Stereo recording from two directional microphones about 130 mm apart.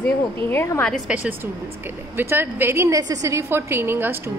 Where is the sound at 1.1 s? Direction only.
10° right (ahead or behind).